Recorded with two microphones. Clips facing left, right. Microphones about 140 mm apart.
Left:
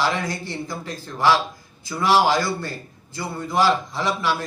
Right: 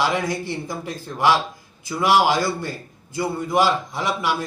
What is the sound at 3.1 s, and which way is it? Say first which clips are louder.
A man's voice: right 3 dB; 20° right (ahead or behind).